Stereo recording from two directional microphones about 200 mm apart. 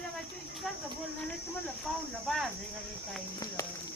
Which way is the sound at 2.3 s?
Centre (ahead or behind).